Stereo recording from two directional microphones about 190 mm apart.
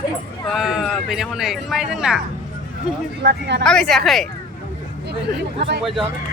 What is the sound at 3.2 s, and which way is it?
Speech, 60° right (ahead or behind).